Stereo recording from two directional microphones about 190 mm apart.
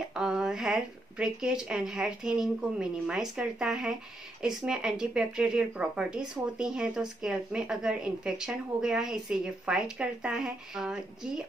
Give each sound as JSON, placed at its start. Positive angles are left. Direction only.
{"t": 0.1, "sound": "speech", "side_deg": -5}